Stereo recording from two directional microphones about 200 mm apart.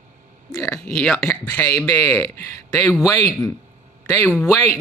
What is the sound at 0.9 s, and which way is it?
Speech, 5° left (ahead or behind).